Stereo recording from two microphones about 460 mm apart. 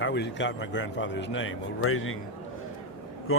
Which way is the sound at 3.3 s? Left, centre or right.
Left.